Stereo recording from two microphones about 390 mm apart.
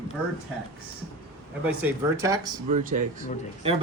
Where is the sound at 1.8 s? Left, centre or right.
Centre.